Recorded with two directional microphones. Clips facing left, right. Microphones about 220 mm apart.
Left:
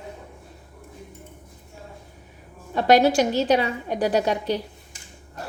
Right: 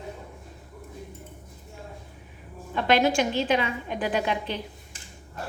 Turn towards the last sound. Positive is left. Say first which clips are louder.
# left 5 dB
turn(degrees=40)  # may be behind; listen again after turning